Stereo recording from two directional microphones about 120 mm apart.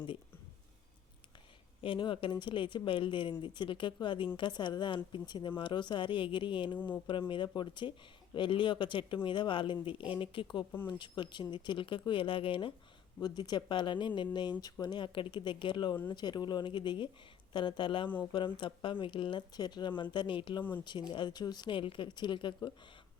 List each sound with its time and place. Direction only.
1.8 s speech: 45° left (ahead or behind)
6.7 s speech: 15° left (ahead or behind)
7.1 s speech: 40° left (ahead or behind)